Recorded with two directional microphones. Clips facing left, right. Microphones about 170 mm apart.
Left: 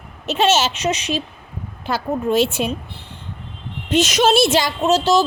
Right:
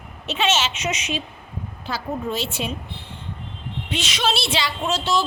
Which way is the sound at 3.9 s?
45° left (ahead or behind).